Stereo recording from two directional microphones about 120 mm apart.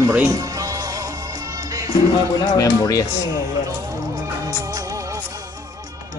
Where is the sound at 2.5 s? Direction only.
30° left (ahead or behind).